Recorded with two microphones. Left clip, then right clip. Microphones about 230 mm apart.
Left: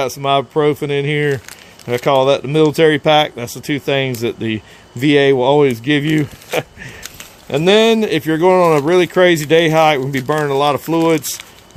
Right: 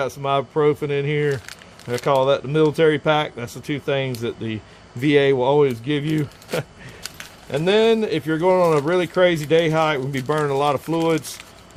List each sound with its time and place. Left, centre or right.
0.0 s speech: left